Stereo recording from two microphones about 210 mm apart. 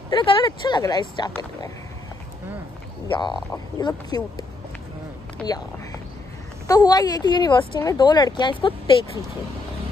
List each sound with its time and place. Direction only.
0.1 s a woman's voice: 25° left (ahead or behind)
3.1 s a woman's voice: 20° left (ahead or behind)